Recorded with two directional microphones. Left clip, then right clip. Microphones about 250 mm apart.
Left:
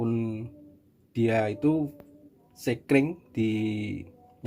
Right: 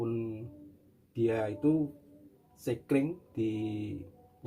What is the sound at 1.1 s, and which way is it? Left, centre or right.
Speech, left.